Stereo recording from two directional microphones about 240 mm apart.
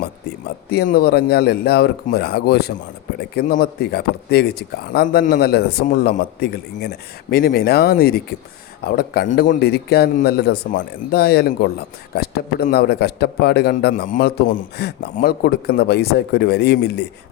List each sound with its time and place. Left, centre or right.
0.7 s speech: left